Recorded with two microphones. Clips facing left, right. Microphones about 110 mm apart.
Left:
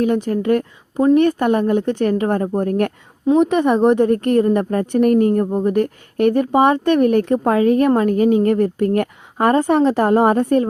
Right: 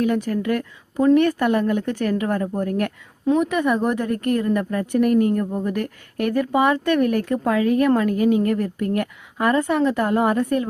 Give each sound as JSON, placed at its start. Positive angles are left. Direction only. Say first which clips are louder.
{"t": 0.0, "sound": "a woman's voice", "louder": "left 3 dB", "side_deg": 25}